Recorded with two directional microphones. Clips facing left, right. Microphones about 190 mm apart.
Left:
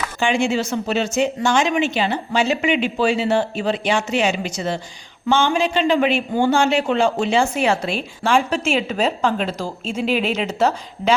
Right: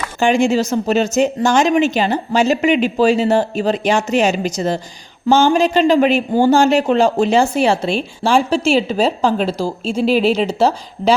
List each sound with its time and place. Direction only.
0.2 s speech: 40° right (ahead or behind)